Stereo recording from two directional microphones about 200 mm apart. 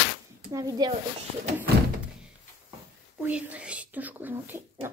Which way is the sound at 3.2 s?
5° right (ahead or behind).